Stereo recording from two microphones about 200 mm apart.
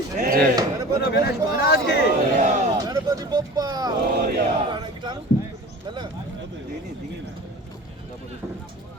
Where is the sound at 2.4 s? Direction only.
35° right (ahead or behind).